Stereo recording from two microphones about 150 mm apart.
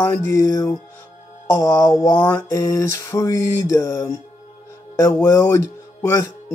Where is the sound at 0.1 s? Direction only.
20° left (ahead or behind).